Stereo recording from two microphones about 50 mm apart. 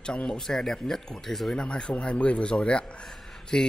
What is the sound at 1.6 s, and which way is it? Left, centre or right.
Speech, centre.